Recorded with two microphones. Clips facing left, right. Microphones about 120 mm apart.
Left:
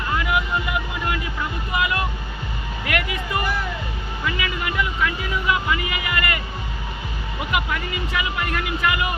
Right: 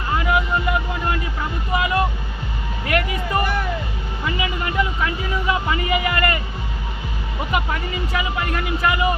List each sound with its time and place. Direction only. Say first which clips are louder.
0.3 s music: right 3 dB; 35° right (ahead or behind)
1.7 s speech: right 4 dB; 35° right (ahead or behind)
7.5 s speech: right 1 dB; 35° right (ahead or behind)